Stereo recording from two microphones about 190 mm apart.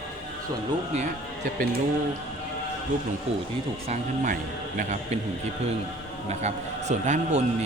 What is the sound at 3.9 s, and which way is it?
A man's voice, 45° right (ahead or behind).